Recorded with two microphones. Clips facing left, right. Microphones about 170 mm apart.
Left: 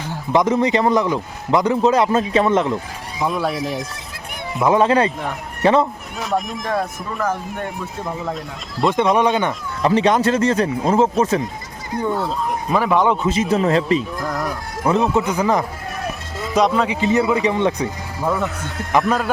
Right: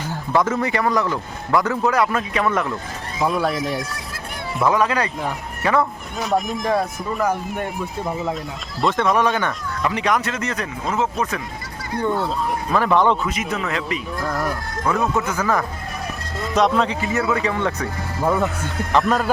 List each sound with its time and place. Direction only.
0.3 s a man's voice: 20° left (ahead or behind)
3.2 s speech: centre (ahead or behind)
4.6 s a man's voice: 25° left (ahead or behind)
6.1 s speech: centre (ahead or behind)
8.9 s a man's voice: 20° left (ahead or behind)
11.9 s a man's voice: 5° left (ahead or behind)
13.2 s speech: 25° left (ahead or behind)
14.3 s chicken: centre (ahead or behind)
15.3 s a man's voice: 20° left (ahead or behind)
16.4 s speech: centre (ahead or behind)
16.9 s a man's voice: 20° left (ahead or behind)
18.3 s speech: centre (ahead or behind)